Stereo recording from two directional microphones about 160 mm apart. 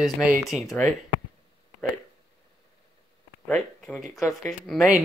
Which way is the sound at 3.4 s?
5° left (ahead or behind).